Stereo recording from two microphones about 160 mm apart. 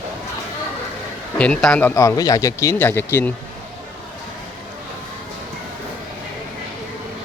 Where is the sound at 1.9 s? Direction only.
20° left (ahead or behind).